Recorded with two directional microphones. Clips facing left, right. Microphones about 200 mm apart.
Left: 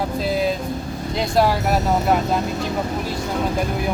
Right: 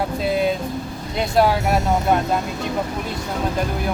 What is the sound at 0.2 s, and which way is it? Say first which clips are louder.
Vehicle: right 1 dB; centre (ahead or behind).